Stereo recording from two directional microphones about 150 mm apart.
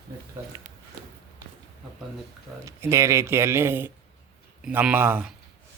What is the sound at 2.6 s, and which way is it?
Speech, 20° right (ahead or behind).